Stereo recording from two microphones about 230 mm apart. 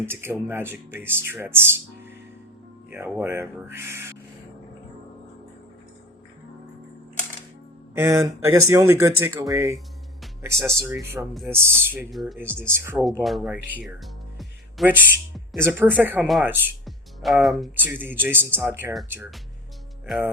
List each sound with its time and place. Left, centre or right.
0.0 s speech: centre
7.9 s speech: centre